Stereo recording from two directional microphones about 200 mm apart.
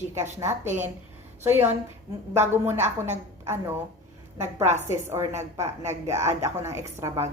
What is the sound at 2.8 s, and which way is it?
Speech, 35° right (ahead or behind).